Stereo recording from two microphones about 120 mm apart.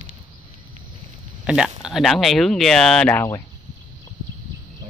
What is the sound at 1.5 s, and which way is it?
Speech, 5° right (ahead or behind).